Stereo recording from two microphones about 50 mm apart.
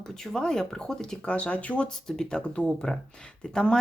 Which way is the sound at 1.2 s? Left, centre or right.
Left.